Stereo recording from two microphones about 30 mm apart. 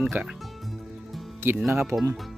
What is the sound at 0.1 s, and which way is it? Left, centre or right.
Speech, right.